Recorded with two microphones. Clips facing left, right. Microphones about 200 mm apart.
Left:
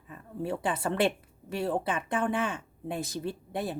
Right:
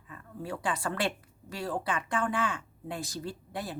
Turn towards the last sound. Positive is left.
turn(degrees=25)  # may be behind; listen again after turning